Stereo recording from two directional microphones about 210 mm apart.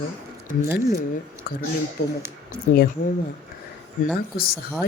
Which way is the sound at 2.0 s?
50° left (ahead or behind).